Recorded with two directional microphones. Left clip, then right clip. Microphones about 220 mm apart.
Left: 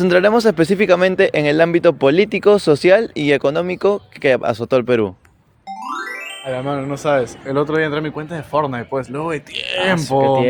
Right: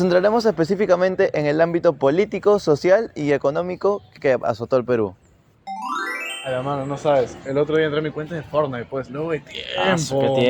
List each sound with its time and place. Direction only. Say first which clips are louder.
0.0 s speech: left 4 dB; 40° left (ahead or behind)
5.8 s music: even; centre (ahead or behind)
6.4 s music: left 3 dB; 35° left (ahead or behind)
6.9 s speech: left 1 dB; 55° left (ahead or behind)
9.9 s speech: left 6 dB; 5° left (ahead or behind)